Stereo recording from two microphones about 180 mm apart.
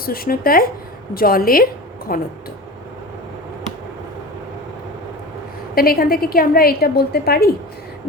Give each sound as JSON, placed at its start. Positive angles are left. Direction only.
{"t": 0.0, "sound": "a woman's voice", "side_deg": 55}
{"t": 5.7, "sound": "a woman's voice", "side_deg": 55}